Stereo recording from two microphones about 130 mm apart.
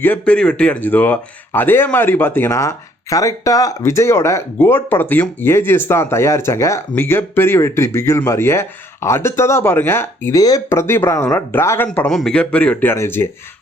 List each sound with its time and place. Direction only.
0.0 s speech: 10° left (ahead or behind)
11.9 s speech: 5° left (ahead or behind)